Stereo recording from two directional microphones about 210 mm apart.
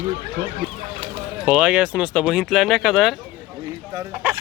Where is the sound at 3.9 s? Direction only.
15° right (ahead or behind).